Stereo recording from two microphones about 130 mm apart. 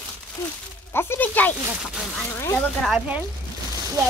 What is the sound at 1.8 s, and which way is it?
Speech, centre (ahead or behind).